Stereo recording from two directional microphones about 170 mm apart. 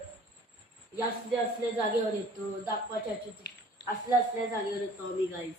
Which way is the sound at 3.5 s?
75° left (ahead or behind).